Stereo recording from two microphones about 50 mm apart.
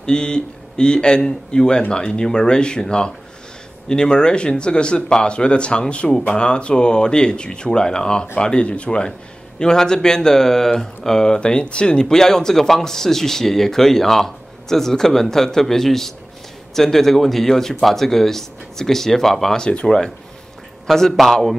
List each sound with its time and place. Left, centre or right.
0.0 s speech: centre
19.7 s speech: left
20.8 s a man's voice: centre